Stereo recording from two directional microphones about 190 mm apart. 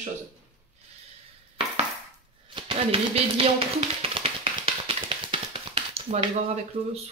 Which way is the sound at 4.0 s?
30° right (ahead or behind).